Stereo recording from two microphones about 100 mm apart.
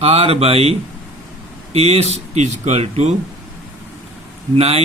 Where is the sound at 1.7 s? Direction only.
90° right.